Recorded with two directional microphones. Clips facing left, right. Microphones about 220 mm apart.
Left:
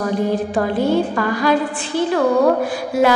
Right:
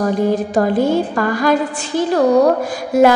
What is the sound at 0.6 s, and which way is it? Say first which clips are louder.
A woman's voice: right 2 dB; 45° right (ahead or behind).